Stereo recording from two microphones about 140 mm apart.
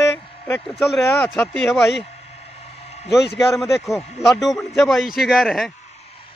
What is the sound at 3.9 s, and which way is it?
A man's voice, centre (ahead or behind).